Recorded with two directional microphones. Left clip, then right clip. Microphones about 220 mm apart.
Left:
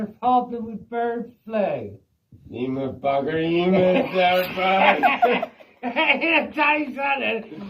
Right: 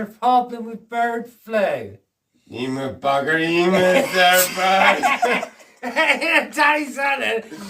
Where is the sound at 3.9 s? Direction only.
25° right (ahead or behind).